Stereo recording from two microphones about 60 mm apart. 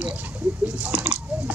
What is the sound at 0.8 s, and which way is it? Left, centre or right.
Squish, right.